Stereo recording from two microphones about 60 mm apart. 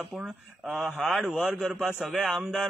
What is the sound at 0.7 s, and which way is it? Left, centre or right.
Speech, centre.